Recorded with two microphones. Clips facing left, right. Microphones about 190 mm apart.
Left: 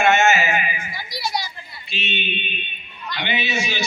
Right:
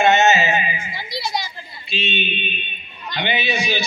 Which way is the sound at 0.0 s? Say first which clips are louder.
Right 2 dB; 20° right (ahead or behind).